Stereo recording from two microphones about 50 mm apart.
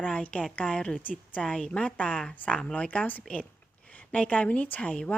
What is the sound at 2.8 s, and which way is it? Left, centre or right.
A woman's voice, left.